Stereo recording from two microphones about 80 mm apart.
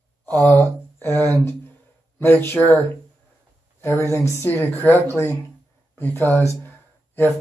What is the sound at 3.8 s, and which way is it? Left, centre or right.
Speech, left.